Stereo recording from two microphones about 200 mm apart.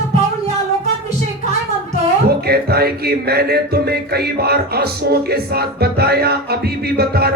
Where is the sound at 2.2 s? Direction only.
50° right (ahead or behind).